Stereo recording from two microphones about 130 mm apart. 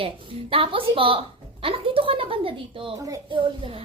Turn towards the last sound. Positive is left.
turn(degrees=-45)  # may be behind; listen again after turning